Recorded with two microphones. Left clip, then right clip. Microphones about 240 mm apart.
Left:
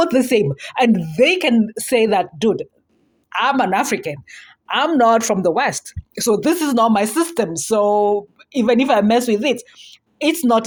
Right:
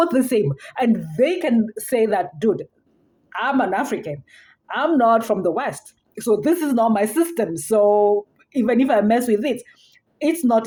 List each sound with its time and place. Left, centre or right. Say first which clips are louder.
0.0 s a woman's voice: left 3 dB; centre